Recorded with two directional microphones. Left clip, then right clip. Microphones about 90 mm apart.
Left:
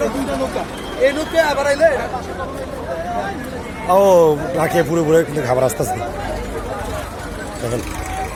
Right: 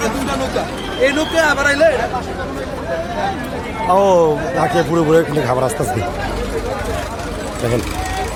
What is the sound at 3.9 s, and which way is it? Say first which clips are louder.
Speech: left 1 dB; 30° left (ahead or behind).